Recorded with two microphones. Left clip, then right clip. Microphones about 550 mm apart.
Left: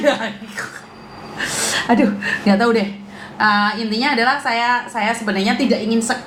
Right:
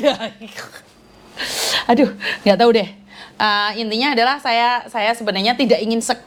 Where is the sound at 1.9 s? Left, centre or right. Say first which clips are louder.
Right 1 dB; right.